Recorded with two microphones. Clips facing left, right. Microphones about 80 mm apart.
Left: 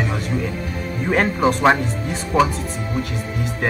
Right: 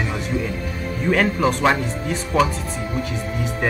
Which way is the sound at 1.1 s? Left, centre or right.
Left.